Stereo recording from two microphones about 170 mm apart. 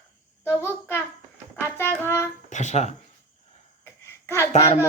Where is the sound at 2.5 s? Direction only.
45° left (ahead or behind).